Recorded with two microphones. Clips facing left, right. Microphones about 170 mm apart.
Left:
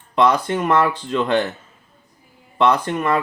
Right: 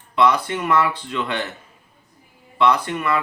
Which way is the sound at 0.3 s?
40° left (ahead or behind).